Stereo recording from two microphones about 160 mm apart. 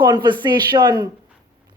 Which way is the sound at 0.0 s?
25° right (ahead or behind).